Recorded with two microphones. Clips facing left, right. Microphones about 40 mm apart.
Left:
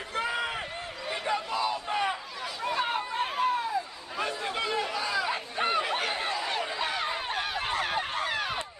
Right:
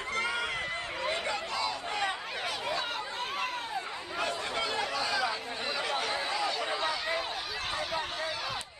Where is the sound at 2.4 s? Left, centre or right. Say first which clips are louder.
Even; right.